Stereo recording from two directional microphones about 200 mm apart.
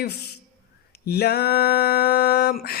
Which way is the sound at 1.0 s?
50° left (ahead or behind).